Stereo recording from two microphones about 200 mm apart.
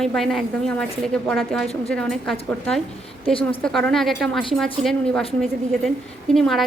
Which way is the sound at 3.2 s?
25° left (ahead or behind).